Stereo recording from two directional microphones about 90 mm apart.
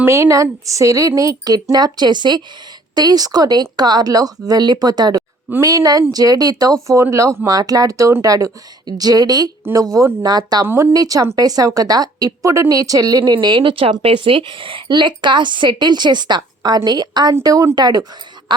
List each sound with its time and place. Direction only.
0.0 s a woman's voice: 30° right (ahead or behind)
6.8 s speech: 35° right (ahead or behind)
13.3 s a woman's voice: 70° right (ahead or behind); by 17.3 s 50° right (ahead or behind)
17.4 s speech: 40° right (ahead or behind)